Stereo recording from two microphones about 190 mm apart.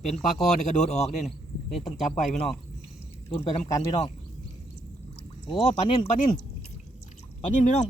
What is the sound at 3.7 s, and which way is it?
Speech, 20° left (ahead or behind).